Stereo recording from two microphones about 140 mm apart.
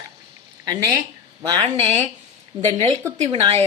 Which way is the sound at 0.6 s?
25° right (ahead or behind).